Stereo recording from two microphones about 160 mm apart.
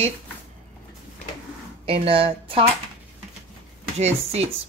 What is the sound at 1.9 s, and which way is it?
Speech, 35° right (ahead or behind).